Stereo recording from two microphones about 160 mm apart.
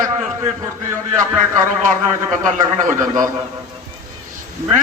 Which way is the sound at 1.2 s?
55° right (ahead or behind).